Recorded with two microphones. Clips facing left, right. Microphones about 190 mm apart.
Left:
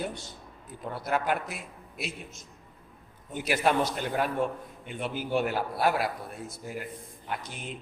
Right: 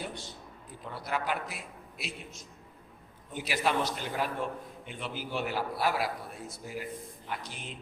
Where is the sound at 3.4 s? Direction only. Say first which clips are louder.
Left 4 dB; 50° left (ahead or behind).